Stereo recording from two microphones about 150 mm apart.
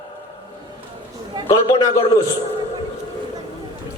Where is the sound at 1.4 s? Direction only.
20° left (ahead or behind).